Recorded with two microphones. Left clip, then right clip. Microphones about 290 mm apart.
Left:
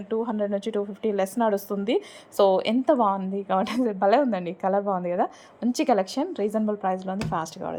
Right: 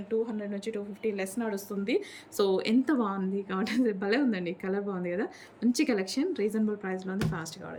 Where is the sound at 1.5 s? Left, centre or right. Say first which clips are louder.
Left 6 dB; centre.